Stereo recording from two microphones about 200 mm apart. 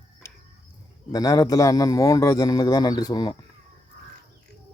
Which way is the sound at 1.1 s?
20° left (ahead or behind).